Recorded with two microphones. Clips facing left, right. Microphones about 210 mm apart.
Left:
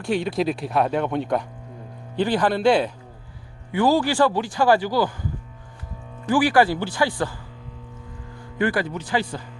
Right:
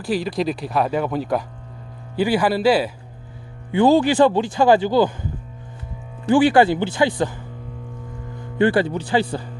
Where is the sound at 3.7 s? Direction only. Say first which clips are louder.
Right 4 dB; 25° right (ahead or behind).